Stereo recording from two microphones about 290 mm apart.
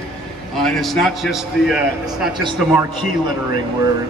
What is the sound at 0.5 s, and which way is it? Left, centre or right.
A man's voice, centre.